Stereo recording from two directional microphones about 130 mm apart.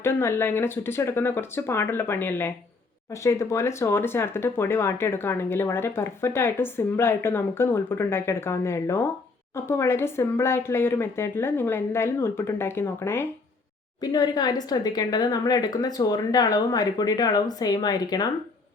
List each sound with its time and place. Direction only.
0.0 s speech: 20° left (ahead or behind)
14.0 s speech: 35° left (ahead or behind)